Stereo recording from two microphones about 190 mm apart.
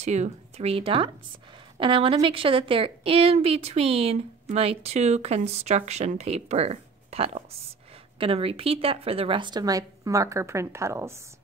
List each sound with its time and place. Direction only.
0.0 s a woman's voice: 35° right (ahead or behind); by 11.1 s 15° right (ahead or behind)